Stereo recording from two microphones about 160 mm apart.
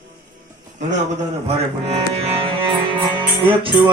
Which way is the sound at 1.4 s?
40° right (ahead or behind).